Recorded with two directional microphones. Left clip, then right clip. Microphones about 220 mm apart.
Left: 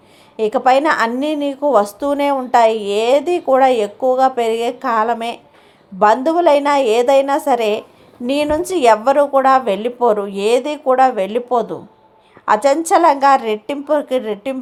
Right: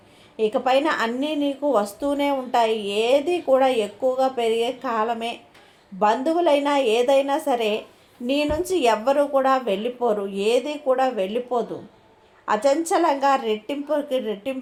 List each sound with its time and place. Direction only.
0.3 s a woman's voice: 35° left (ahead or behind)